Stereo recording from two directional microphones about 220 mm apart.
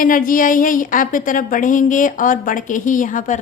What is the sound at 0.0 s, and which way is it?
A woman's voice, 40° left (ahead or behind).